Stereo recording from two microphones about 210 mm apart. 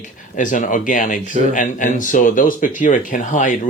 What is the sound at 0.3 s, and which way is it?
Speech, 40° left (ahead or behind).